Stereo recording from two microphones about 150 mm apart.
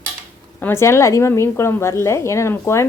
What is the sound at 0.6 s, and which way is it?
A woman's voice, 15° left (ahead or behind).